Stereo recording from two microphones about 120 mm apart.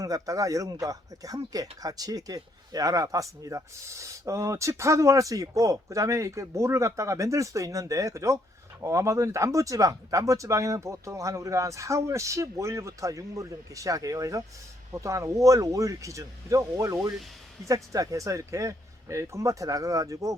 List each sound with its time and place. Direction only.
0.0 s speech: 30° right (ahead or behind)